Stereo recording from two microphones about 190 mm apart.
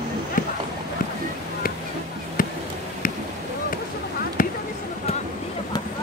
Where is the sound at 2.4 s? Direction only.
45° left (ahead or behind).